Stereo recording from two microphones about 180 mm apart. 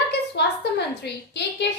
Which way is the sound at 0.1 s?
65° left (ahead or behind).